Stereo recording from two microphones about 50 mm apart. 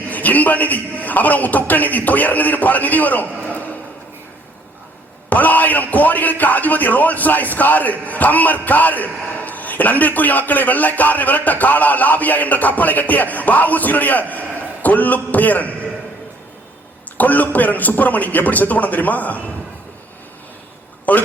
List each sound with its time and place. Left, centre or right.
0.1 s a man's voice: left
5.3 s a man's voice: left
17.2 s a man's voice: left
21.1 s a man's voice: left